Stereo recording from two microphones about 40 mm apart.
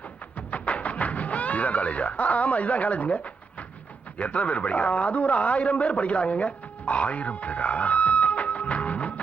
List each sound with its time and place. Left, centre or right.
0.3 s music: left
4.2 s a man's voice: left